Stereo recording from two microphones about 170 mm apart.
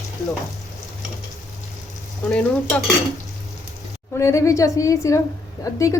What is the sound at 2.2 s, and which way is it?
Speech, 5° left (ahead or behind).